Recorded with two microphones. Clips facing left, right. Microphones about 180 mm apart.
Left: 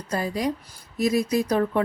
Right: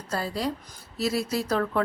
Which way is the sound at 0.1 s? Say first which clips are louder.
Left 3 dB; 15° left (ahead or behind).